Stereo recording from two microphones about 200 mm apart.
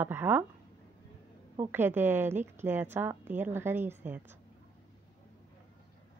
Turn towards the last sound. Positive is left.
turn(degrees=-10)  # may be behind; listen again after turning